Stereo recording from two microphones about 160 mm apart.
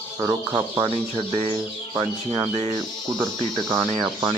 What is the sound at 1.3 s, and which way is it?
Speech, 30° right (ahead or behind).